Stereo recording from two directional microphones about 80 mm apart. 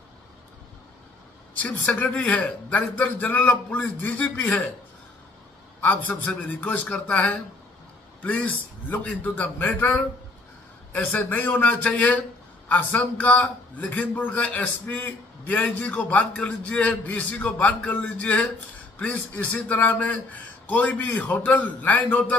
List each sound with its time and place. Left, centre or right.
1.6 s a man's voice: centre
5.8 s a man's voice: left